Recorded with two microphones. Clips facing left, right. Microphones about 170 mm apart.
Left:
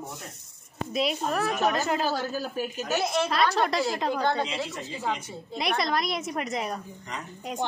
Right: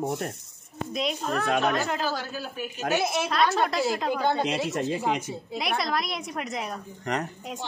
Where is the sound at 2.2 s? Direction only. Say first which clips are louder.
Left 4 dB; 40° left (ahead or behind).